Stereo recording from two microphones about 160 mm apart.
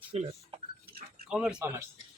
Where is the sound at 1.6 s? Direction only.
15° right (ahead or behind).